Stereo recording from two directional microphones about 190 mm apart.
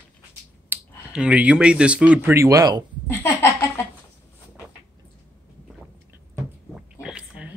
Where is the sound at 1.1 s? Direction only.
5° right (ahead or behind).